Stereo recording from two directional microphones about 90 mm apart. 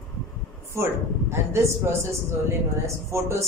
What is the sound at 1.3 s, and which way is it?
A man's voice, 30° right (ahead or behind).